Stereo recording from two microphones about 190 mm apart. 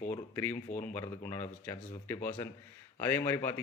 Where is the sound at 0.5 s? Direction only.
40° left (ahead or behind).